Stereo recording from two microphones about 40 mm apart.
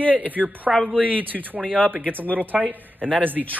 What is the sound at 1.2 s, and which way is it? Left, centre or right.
Speech, right.